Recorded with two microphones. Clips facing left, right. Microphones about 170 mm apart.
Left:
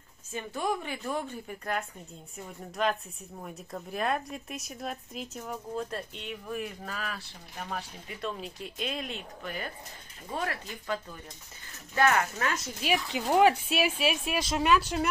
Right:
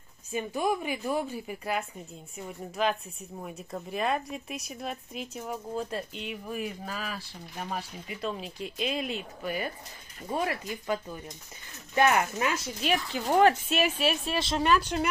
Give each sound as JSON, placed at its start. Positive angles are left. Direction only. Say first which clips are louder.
{"t": 0.3, "sound": "speech", "louder": "right 3 dB", "side_deg": -15}
{"t": 12.6, "sound": "speech", "louder": "right 1 dB", "side_deg": 5}